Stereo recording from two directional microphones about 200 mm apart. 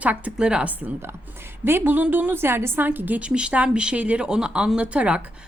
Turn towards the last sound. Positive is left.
turn(degrees=-5)  # may be behind; listen again after turning